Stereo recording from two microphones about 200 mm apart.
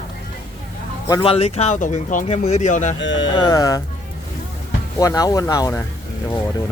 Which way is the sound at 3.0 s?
65° left (ahead or behind).